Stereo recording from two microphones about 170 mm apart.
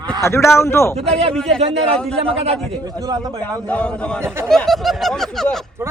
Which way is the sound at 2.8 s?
20° right (ahead or behind).